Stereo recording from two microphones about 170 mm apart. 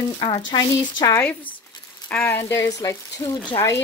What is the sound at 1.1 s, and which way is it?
Speech, 10° left (ahead or behind).